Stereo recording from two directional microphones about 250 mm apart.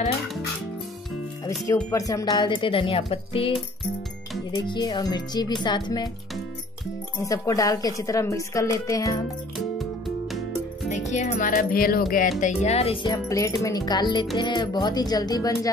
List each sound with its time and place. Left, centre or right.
1.7 s speech: centre
4.6 s speech: centre
7.2 s speech: centre
9.8 s music: centre
10.9 s speech: left